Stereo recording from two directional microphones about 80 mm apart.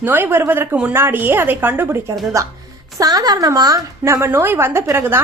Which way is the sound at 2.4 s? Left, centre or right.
Right.